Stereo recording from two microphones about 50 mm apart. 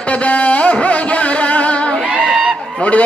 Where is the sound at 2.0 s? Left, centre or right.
Centre.